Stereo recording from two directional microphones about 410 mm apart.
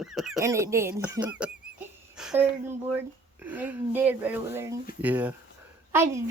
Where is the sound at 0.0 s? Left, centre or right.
Centre.